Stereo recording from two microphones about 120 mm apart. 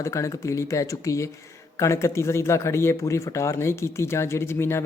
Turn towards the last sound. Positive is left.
turn(degrees=20)  # may be behind; listen again after turning